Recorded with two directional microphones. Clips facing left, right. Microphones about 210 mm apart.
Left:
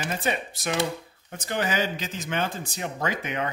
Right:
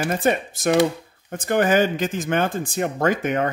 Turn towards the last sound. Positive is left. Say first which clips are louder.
# right 8 dB
turn(degrees=-50)  # may be behind; listen again after turning